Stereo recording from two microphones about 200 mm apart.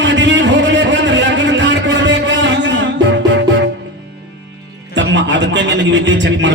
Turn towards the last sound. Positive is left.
turn(degrees=-65)  # may be behind; listen again after turning